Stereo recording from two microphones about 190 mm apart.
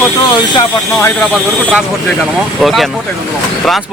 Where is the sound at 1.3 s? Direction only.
5° right (ahead or behind).